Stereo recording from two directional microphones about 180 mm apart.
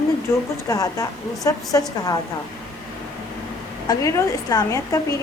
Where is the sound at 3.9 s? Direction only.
15° left (ahead or behind).